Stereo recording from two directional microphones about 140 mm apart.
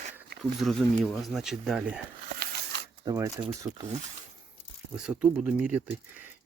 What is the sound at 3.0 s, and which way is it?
Speech, 25° right (ahead or behind).